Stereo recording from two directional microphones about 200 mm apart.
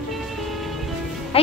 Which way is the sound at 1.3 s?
30° left (ahead or behind).